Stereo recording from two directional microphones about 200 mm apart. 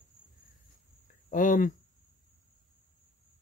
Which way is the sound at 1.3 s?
40° left (ahead or behind).